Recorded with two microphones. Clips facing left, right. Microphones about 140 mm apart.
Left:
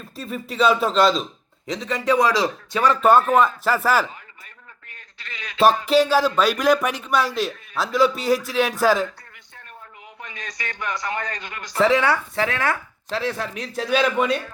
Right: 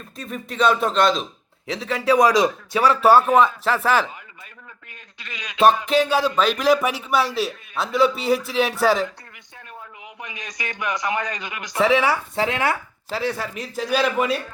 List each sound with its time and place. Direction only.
0.2 s a man's voice: 5° left (ahead or behind)
5.2 s a man's voice: 20° right (ahead or behind)
5.6 s a man's voice: 5° left (ahead or behind)
10.2 s a man's voice: 15° right (ahead or behind)
12.4 s speech: 20° right (ahead or behind)
13.1 s a man's voice: centre (ahead or behind)